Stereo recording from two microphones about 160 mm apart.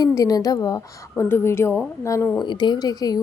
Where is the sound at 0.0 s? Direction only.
20° left (ahead or behind).